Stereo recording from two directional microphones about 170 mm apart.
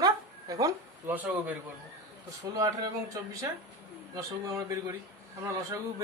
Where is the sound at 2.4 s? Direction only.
20° right (ahead or behind).